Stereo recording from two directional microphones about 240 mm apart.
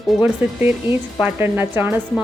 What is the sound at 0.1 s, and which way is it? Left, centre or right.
Speech, centre.